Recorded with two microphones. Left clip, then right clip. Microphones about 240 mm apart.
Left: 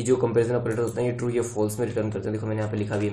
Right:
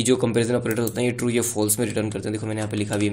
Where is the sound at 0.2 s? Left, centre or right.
Right.